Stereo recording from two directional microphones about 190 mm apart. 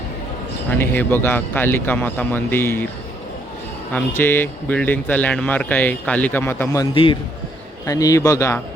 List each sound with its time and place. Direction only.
0.8 s speech: 10° left (ahead or behind)
3.9 s speech: 10° left (ahead or behind)
6.9 s a man's voice: 25° left (ahead or behind)